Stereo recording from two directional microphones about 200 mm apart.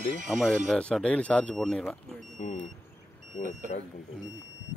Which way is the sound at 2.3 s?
40° left (ahead or behind).